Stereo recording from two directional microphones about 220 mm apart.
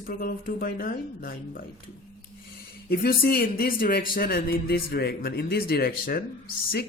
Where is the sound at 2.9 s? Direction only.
45° left (ahead or behind).